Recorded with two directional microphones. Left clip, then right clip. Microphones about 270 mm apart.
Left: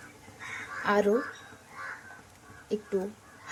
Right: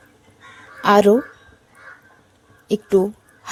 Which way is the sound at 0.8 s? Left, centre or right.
Right.